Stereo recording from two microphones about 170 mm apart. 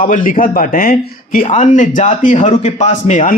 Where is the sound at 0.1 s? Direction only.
50° left (ahead or behind).